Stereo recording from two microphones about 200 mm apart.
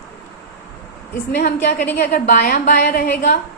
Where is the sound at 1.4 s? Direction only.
45° left (ahead or behind).